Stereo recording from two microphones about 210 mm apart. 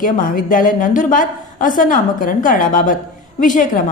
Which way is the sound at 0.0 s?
40° left (ahead or behind).